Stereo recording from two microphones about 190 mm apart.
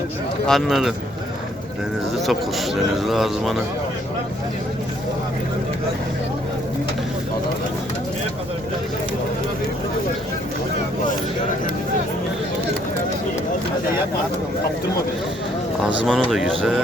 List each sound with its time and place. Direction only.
0.4 s a man's voice: centre (ahead or behind)
2.2 s a man's voice: centre (ahead or behind)
16.0 s a man's voice: centre (ahead or behind)